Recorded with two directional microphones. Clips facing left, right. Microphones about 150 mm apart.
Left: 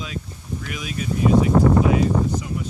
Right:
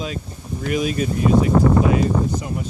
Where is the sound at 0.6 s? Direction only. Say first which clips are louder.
Right 10 dB; 40° right (ahead or behind).